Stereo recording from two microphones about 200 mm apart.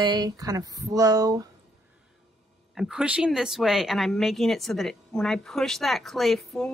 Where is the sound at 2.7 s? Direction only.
5° right (ahead or behind).